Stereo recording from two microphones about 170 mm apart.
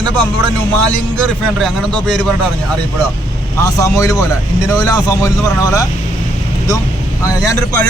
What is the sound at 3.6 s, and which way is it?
Speech, 20° left (ahead or behind).